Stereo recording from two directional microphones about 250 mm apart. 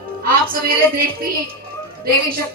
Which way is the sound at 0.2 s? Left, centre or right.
Right.